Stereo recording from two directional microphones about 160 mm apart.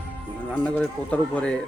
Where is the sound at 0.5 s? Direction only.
10° left (ahead or behind).